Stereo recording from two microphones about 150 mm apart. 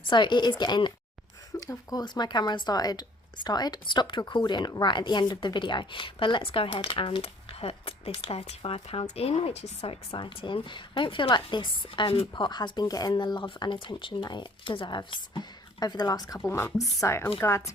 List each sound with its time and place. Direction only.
0.1 s speech: 30° left (ahead or behind)
10.1 s speech: 30° left (ahead or behind)